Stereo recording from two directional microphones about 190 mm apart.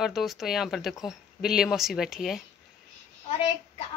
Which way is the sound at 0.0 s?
Centre (ahead or behind).